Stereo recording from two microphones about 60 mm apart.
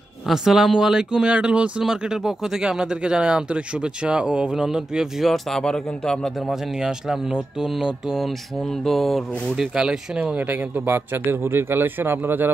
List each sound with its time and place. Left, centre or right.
0.3 s speech: centre
5.2 s speech: centre
6.5 s speech: centre
8.3 s speech: centre
9.8 s speech: centre
10.3 s speech: right